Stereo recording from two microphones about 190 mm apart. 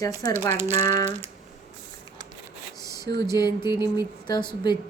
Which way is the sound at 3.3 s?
20° left (ahead or behind).